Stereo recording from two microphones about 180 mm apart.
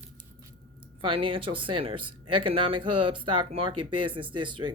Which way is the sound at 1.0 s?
30° right (ahead or behind).